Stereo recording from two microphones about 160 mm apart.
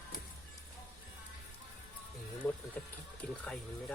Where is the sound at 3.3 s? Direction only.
5° left (ahead or behind).